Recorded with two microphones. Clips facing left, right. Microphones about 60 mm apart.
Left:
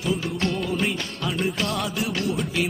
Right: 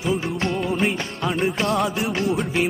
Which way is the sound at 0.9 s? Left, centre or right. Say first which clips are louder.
Right 3 dB; right.